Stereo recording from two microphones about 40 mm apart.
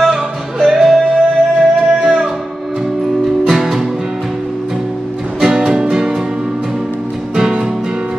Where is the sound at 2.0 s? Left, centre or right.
Right.